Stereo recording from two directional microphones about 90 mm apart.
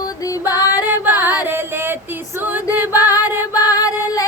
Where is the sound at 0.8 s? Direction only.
25° right (ahead or behind).